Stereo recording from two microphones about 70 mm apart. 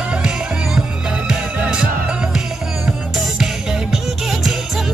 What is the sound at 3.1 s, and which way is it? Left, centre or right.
Music, centre.